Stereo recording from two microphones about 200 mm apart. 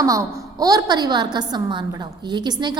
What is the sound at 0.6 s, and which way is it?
A woman's voice, 20° right (ahead or behind).